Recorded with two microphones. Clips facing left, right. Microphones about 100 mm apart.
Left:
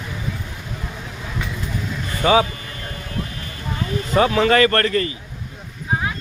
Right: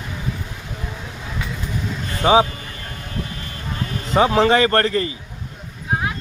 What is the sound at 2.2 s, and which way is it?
Speech, 20° right (ahead or behind).